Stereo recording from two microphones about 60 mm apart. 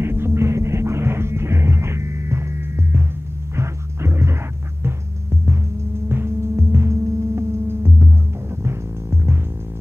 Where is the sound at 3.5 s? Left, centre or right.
Right.